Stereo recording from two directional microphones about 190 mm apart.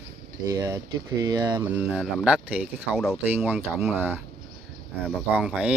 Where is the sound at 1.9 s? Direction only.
5° right (ahead or behind).